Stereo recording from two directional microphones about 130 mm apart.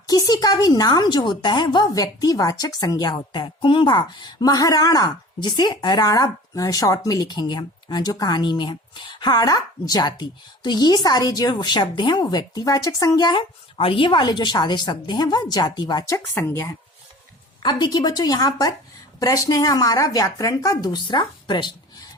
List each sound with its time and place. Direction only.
0.1 s a woman's voice: 30° left (ahead or behind)
17.6 s a woman's voice: 35° left (ahead or behind)